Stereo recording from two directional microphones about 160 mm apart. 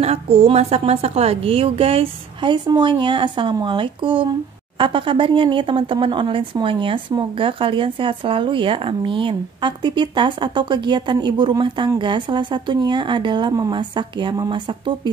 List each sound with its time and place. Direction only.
0.0 s a woman's voice: 40° right (ahead or behind)